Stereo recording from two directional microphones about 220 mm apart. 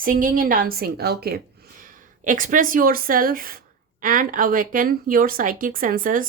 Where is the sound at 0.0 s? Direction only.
40° right (ahead or behind).